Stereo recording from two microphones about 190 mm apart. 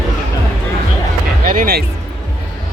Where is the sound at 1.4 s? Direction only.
50° right (ahead or behind).